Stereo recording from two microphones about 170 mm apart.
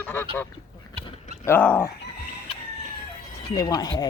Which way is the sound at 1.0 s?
40° right (ahead or behind).